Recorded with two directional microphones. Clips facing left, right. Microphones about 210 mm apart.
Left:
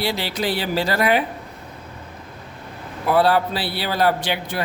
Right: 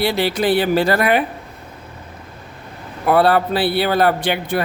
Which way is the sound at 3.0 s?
55° right (ahead or behind).